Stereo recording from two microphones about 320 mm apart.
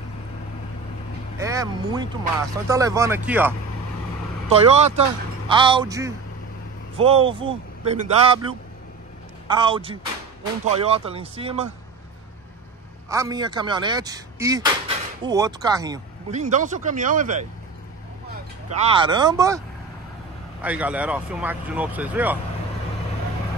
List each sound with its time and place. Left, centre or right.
1.4 s speech: centre
4.5 s speech: centre
9.5 s speech: centre
13.1 s speech: centre
20.6 s speech: centre